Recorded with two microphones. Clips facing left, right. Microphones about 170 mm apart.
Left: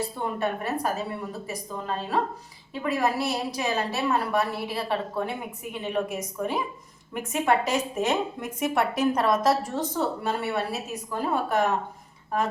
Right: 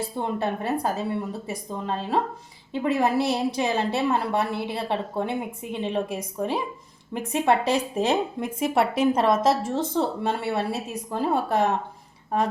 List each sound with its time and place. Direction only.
0.2 s a woman's voice: 30° right (ahead or behind)